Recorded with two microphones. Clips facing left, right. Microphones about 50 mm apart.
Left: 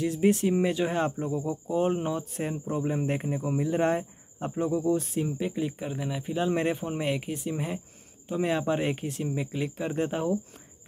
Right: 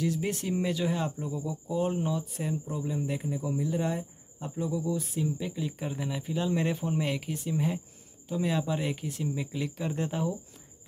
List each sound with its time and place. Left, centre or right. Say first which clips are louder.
0.0 s speech: left 6 dB; left
5.5 s speech: left 4 dB; left
5.8 s speech: left 1 dB; centre
6.5 s speech: left 2 dB; left
6.8 s speech: left 1 dB; left